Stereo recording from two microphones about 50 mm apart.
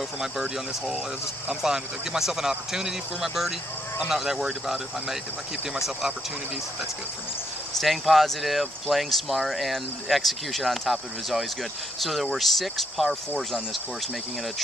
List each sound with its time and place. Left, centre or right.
1.6 s speech: centre
4.7 s speech: centre
7.8 s speech: centre